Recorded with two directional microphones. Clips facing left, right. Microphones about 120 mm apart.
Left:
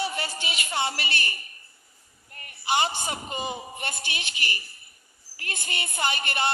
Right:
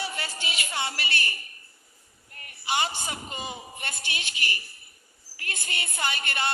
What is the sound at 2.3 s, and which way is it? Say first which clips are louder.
A man's voice: left 3 dB; 30° left (ahead or behind).